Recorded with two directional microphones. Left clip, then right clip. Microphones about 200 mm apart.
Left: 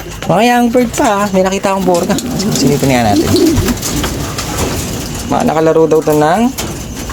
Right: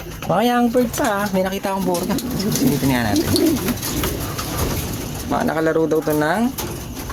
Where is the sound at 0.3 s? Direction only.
10° left (ahead or behind).